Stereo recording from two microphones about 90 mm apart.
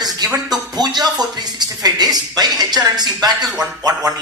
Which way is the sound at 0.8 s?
50° right (ahead or behind).